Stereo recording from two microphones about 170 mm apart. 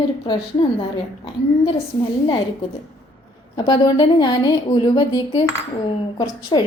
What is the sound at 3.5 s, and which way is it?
A woman's voice, 25° left (ahead or behind).